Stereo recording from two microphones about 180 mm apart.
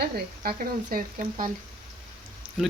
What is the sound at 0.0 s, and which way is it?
Speech, 55° right (ahead or behind).